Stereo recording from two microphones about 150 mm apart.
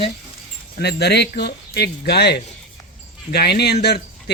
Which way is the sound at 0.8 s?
90° left.